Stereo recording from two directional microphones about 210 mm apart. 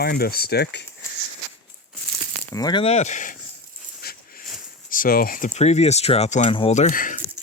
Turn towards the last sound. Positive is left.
turn(degrees=40)  # may be behind; listen again after turning